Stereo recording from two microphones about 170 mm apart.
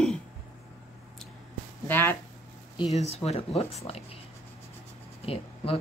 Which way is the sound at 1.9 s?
10° left (ahead or behind).